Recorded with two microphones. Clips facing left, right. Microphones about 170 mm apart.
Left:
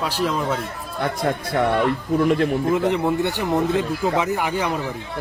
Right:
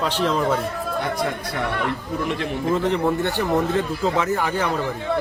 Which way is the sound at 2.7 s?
10° left (ahead or behind).